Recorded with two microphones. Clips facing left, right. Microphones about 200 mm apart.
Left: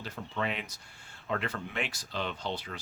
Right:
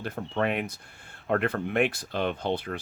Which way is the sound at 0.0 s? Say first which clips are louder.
Right 7 dB; 55° right (ahead or behind).